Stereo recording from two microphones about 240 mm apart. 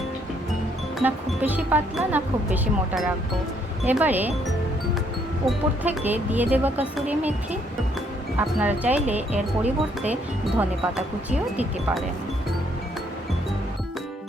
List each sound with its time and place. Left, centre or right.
0.9 s speech: centre
5.5 s speech: centre
8.4 s speech: centre
9.3 s speech: right
10.1 s speech: centre